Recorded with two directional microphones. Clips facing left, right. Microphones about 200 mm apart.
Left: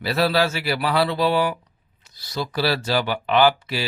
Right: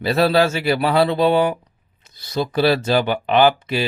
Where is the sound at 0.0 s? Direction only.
25° right (ahead or behind).